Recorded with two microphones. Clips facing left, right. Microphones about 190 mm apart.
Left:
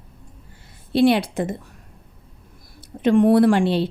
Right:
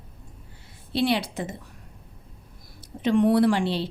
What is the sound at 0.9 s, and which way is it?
Speech, 50° left (ahead or behind).